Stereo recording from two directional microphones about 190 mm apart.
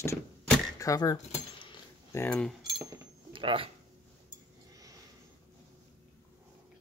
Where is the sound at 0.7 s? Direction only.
20° left (ahead or behind).